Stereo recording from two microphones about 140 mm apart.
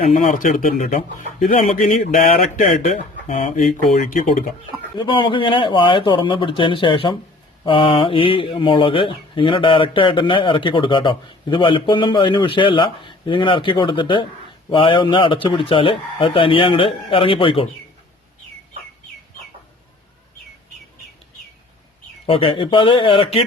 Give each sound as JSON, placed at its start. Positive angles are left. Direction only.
{"t": 0.1, "sound": "speech", "side_deg": 70}
{"t": 1.5, "sound": "speech", "side_deg": 60}
{"t": 4.9, "sound": "speech", "side_deg": 35}
{"t": 22.3, "sound": "speech", "side_deg": 40}